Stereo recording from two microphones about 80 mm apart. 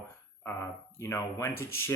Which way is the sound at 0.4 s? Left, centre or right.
Left.